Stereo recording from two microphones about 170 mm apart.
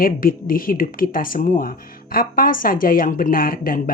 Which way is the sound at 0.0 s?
55° left (ahead or behind).